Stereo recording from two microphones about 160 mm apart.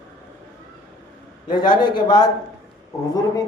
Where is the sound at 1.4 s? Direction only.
25° left (ahead or behind).